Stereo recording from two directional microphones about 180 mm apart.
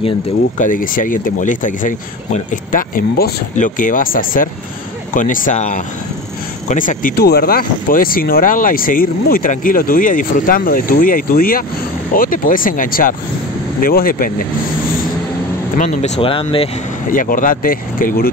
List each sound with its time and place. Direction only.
0.6 s speech: 50° left (ahead or behind)
15.8 s speech: 40° left (ahead or behind)
17.1 s speech: 50° left (ahead or behind)